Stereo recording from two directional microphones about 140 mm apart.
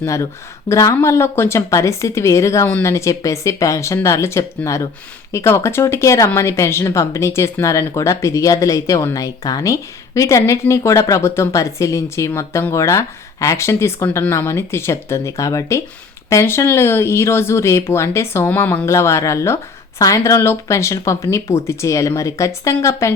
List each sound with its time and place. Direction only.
0.0 s a woman's voice: 20° left (ahead or behind)